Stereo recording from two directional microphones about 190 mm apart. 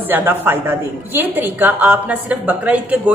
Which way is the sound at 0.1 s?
10° right (ahead or behind).